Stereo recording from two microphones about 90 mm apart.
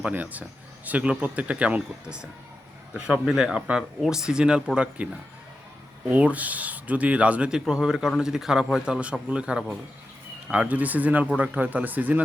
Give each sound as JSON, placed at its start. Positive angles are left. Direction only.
{"t": 0.0, "sound": "speech", "side_deg": -15}
{"t": 6.1, "sound": "speech", "side_deg": -15}